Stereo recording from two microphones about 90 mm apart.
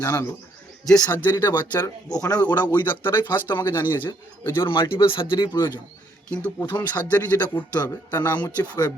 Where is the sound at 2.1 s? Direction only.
45° left (ahead or behind).